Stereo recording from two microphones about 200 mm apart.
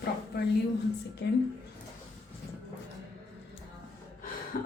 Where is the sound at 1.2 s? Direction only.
60° left (ahead or behind).